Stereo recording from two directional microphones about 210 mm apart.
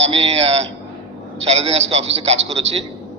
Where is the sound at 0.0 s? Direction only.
30° right (ahead or behind).